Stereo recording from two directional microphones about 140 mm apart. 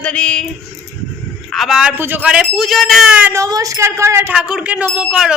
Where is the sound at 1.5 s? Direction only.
Centre (ahead or behind).